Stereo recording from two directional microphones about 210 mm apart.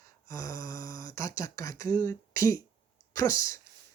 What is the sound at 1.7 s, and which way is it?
Speech, 40° right (ahead or behind).